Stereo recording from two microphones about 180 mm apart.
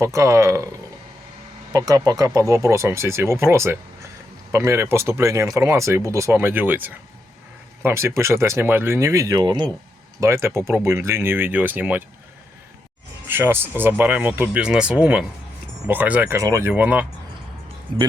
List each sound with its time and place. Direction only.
0.0 s speech: 15° right (ahead or behind)
1.7 s speech: 20° right (ahead or behind)
13.2 s speech: 10° right (ahead or behind)